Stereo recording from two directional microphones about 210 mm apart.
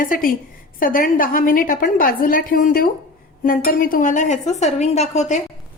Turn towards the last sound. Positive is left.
turn(degrees=30)  # may be behind; listen again after turning